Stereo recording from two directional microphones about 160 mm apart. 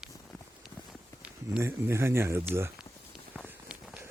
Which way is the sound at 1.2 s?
10° right (ahead or behind).